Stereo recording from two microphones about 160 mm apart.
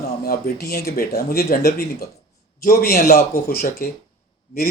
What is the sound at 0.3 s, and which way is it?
Speech, 65° left (ahead or behind).